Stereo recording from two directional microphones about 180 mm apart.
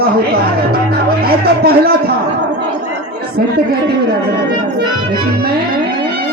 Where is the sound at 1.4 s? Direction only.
60° right (ahead or behind).